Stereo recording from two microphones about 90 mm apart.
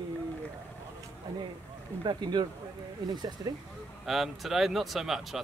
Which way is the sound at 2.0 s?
55° right (ahead or behind).